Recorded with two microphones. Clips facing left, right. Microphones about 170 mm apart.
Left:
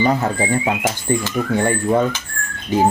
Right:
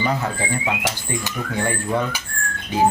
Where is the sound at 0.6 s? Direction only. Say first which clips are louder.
Left 4 dB; 45° left (ahead or behind).